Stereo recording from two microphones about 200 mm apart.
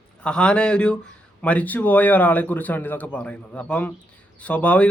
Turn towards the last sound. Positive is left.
turn(degrees=5)  # may be behind; listen again after turning